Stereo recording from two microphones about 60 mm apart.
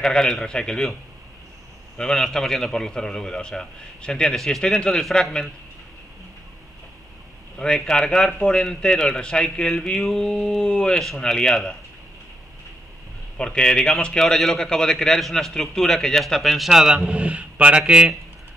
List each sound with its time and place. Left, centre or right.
0.0 s a man's voice: centre
2.0 s a man's voice: centre
7.5 s a man's voice: centre
13.4 s a man's voice: centre
17.1 s speech: right